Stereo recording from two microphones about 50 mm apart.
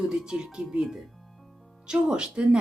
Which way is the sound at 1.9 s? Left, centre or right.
Centre.